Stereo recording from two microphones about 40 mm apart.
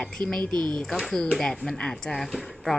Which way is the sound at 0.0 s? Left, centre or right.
Centre.